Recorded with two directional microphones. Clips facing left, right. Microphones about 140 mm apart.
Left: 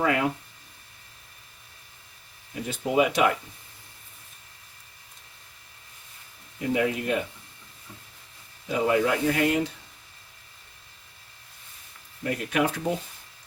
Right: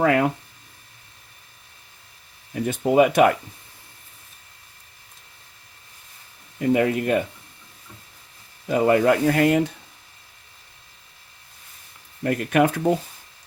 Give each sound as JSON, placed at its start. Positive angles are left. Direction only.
{"t": 0.0, "sound": "speech", "side_deg": -50}
{"t": 2.6, "sound": "speech", "side_deg": -50}
{"t": 6.6, "sound": "speech", "side_deg": -55}
{"t": 8.7, "sound": "speech", "side_deg": -55}
{"t": 12.2, "sound": "speech", "side_deg": -55}